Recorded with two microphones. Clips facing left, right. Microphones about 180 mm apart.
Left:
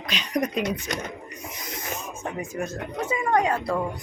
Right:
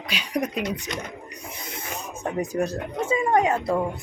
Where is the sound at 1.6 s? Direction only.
30° right (ahead or behind).